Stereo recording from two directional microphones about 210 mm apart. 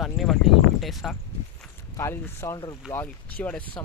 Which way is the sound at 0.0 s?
Centre (ahead or behind).